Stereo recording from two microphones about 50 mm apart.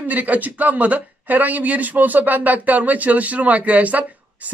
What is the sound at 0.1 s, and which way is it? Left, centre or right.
Speech, right.